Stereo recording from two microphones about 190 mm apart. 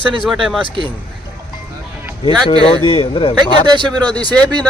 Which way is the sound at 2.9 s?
30° left (ahead or behind).